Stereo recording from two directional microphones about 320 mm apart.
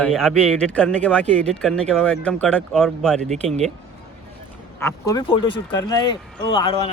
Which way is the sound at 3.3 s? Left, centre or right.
Right.